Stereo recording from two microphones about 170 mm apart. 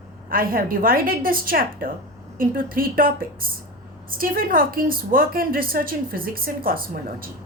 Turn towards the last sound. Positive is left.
turn(degrees=-60)  # may be behind; listen again after turning